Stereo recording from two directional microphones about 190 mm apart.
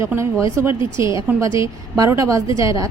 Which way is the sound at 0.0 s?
15° right (ahead or behind).